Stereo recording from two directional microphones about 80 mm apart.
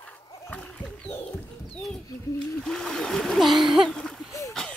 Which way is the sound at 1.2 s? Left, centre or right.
Centre.